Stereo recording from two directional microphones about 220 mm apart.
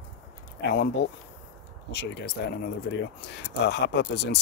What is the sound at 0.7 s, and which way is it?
Speech, 45° left (ahead or behind).